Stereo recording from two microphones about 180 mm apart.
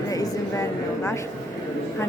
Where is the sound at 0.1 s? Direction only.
20° left (ahead or behind).